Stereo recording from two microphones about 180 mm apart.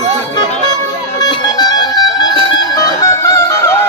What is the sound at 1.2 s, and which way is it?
Music, 20° left (ahead or behind).